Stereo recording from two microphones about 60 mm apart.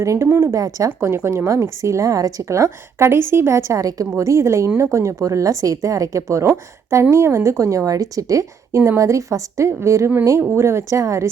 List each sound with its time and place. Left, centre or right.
0.0 s speech: right
0.3 s a woman's voice: right
0.5 s speech: right
1.0 s speech: right
3.1 s a woman's voice: right
4.2 s speech: right
7.9 s speech: right
8.7 s a woman's voice: right